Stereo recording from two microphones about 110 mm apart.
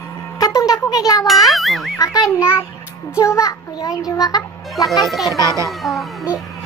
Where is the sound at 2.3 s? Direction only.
20° left (ahead or behind).